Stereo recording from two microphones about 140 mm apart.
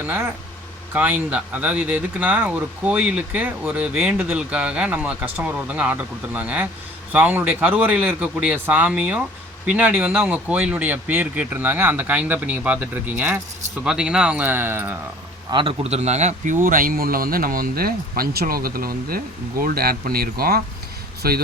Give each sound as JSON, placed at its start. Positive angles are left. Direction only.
{"t": 0.9, "sound": "speech", "side_deg": -10}
{"t": 15.4, "sound": "speech", "side_deg": -40}
{"t": 16.6, "sound": "speech", "side_deg": -80}